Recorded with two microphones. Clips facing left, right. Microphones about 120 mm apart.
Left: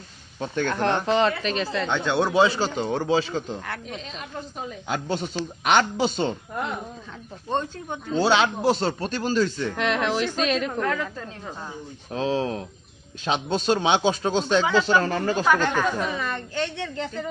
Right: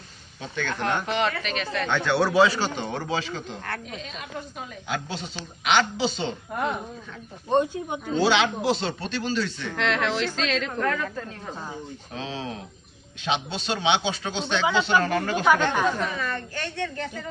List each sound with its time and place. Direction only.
0.3 s speech: 45° left (ahead or behind)
1.7 s a man's voice: 20° left (ahead or behind)
4.9 s speech: 50° left (ahead or behind)
7.5 s speech: 15° right (ahead or behind)
8.2 s speech: 40° left (ahead or behind)
9.7 s a woman's voice: 15° left (ahead or behind)
12.1 s speech: 40° left (ahead or behind)
16.0 s a woman's voice: 15° left (ahead or behind)